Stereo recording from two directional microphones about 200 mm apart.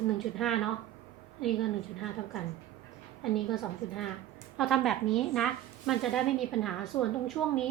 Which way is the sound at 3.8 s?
Centre (ahead or behind).